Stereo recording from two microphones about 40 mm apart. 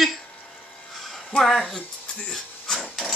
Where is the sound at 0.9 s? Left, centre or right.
Centre.